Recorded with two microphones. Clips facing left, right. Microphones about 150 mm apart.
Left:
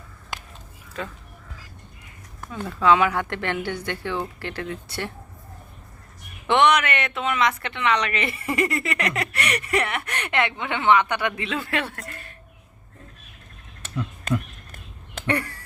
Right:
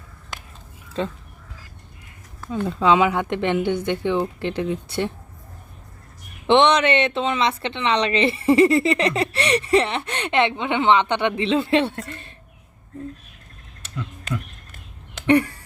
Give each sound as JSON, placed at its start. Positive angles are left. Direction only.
{"t": 0.9, "sound": "speech", "side_deg": -30}
{"t": 2.5, "sound": "speech", "side_deg": -20}
{"t": 6.5, "sound": "speech", "side_deg": -25}
{"t": 15.3, "sound": "speech", "side_deg": -25}